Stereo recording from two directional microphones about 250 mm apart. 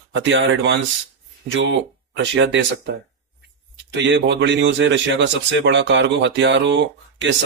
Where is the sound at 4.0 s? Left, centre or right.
Right.